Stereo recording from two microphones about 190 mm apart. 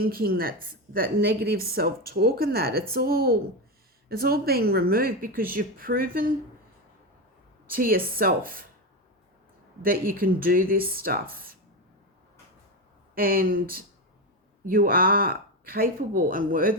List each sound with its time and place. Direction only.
0.0 s a woman's voice: 50° right (ahead or behind)
7.7 s a woman's voice: 50° right (ahead or behind)
9.8 s a woman's voice: 50° right (ahead or behind)
13.1 s a woman's voice: 50° right (ahead or behind)